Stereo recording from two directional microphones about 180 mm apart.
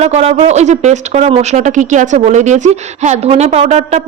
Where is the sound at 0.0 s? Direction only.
35° right (ahead or behind).